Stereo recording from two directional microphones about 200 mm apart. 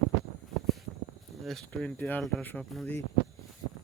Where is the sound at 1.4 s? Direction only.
Centre (ahead or behind).